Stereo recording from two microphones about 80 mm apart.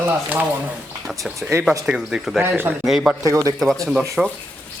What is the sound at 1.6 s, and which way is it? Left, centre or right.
Speech, centre.